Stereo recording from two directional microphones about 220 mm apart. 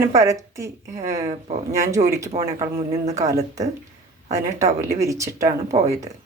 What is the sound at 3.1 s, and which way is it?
A woman's voice, 15° right (ahead or behind).